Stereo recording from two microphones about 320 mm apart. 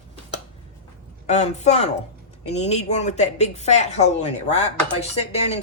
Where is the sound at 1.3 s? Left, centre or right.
Left.